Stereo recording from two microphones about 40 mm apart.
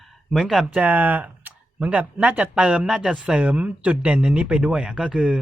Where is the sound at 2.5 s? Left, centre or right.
Right.